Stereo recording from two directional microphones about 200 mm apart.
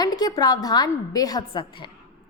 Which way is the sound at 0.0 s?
20° left (ahead or behind).